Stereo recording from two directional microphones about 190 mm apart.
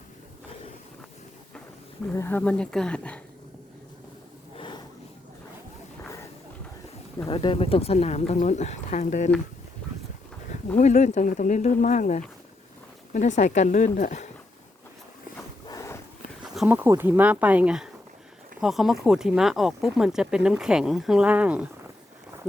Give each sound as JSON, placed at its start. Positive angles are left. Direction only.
{"t": 2.1, "sound": "speech", "side_deg": 10}
{"t": 4.5, "sound": "a sound", "side_deg": 25}
{"t": 7.3, "sound": "speech", "side_deg": 30}
{"t": 10.8, "sound": "speech", "side_deg": 40}
{"t": 15.7, "sound": "a sound", "side_deg": 15}
{"t": 16.4, "sound": "speech", "side_deg": -5}